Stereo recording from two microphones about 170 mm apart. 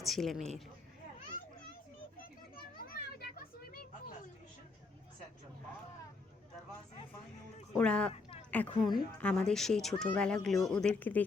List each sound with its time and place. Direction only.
0.0 s speech: centre (ahead or behind)
2.7 s children playing: 60° left (ahead or behind)
7.7 s a woman's voice: 5° left (ahead or behind)
8.1 s a sound: 40° left (ahead or behind)
8.4 s a woman's voice: 10° left (ahead or behind)